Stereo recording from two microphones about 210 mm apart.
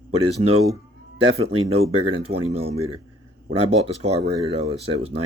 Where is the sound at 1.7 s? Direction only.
30° right (ahead or behind).